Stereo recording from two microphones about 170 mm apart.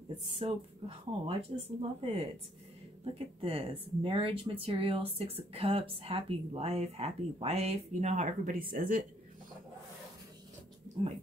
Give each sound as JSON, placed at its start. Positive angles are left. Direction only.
{"t": 0.3, "sound": "speech", "side_deg": -35}
{"t": 3.3, "sound": "speech", "side_deg": -35}